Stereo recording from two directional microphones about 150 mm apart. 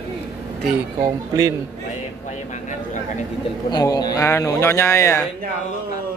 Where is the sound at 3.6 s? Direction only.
25° left (ahead or behind).